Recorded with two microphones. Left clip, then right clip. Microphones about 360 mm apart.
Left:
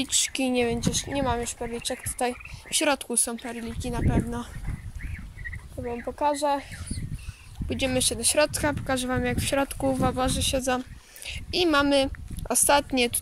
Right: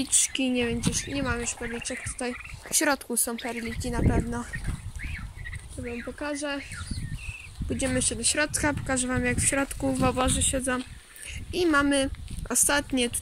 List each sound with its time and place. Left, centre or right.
0.0 s speech: centre
5.9 s speech: centre
7.7 s a child's voice: centre